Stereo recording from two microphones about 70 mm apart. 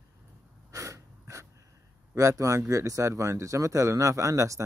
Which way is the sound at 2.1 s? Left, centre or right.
Right.